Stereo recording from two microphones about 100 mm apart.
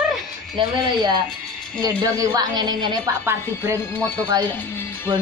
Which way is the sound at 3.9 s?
15° left (ahead or behind).